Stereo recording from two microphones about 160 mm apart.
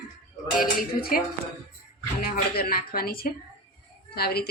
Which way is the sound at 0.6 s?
60° left (ahead or behind).